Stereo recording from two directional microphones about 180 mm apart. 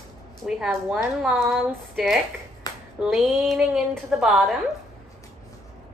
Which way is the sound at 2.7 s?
20° left (ahead or behind).